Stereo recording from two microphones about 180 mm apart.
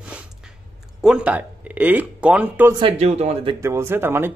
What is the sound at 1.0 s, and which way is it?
Speech, 5° right (ahead or behind).